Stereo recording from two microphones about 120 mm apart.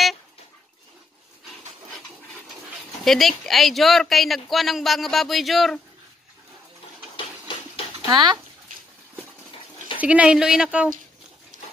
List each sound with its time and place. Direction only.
3.1 s speech: centre (ahead or behind)
7.2 s a sound: 45° left (ahead or behind)
8.1 s speech: 35° right (ahead or behind)
9.9 s a woman's voice: 10° right (ahead or behind)
11.5 s water: 90° right